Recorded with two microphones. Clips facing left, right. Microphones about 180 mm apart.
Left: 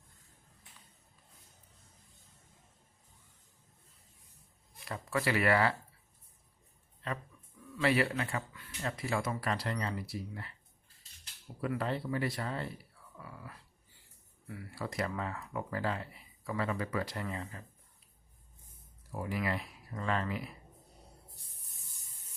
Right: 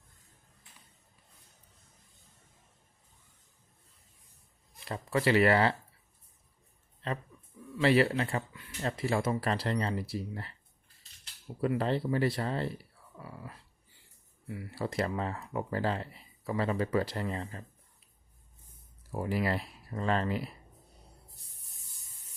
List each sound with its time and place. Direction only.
4.9 s speech: 25° right (ahead or behind)
7.8 s speech: 30° right (ahead or behind)
11.6 s speech: 30° right (ahead or behind)
19.1 s speech: 30° right (ahead or behind)